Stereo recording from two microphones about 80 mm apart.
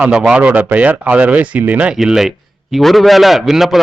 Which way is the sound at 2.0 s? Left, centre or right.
Centre.